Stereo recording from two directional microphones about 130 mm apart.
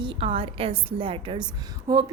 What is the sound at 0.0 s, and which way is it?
A woman's voice, 45° right (ahead or behind).